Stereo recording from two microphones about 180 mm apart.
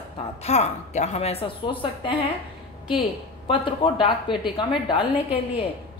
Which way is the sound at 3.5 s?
30° left (ahead or behind).